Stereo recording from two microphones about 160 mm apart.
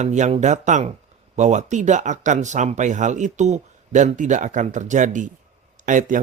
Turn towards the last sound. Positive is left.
turn(degrees=-50)  # may be behind; listen again after turning